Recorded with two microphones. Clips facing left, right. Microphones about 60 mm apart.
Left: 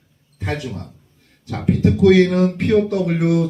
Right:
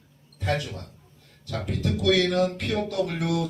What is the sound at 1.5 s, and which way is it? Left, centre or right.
Speech, left.